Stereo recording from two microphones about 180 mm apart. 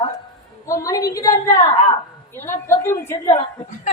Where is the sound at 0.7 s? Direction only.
20° left (ahead or behind).